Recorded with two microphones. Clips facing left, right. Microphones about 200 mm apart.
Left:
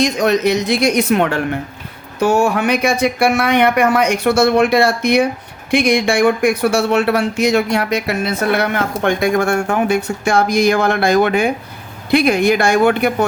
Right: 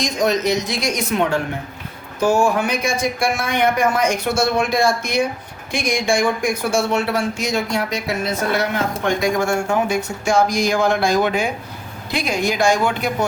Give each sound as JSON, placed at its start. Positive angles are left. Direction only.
{"t": 0.0, "sound": "speech", "side_deg": 65}